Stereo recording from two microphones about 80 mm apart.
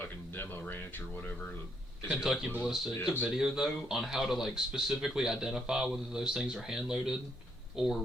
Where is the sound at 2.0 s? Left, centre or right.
Centre.